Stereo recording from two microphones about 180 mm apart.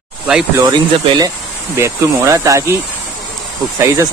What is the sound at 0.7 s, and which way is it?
Speech, 20° right (ahead or behind).